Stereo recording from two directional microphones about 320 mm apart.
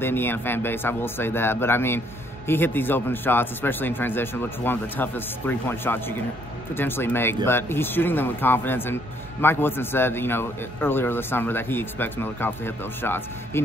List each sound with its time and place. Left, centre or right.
0.0 s a man's voice: centre